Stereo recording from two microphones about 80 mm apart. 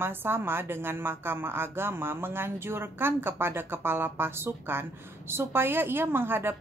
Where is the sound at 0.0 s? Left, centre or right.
Right.